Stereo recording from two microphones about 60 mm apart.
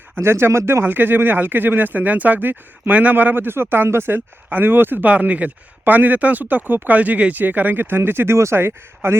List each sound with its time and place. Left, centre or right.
0.2 s speech: right
5.0 s speech: right